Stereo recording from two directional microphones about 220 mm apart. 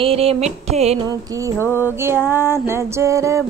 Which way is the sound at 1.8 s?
10° right (ahead or behind).